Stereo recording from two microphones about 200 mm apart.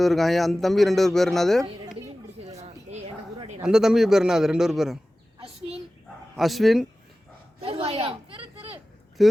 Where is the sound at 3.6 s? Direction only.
5° right (ahead or behind).